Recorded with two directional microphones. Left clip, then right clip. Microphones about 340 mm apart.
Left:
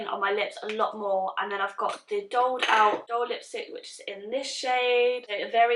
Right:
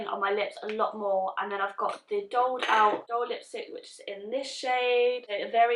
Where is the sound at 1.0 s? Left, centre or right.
Centre.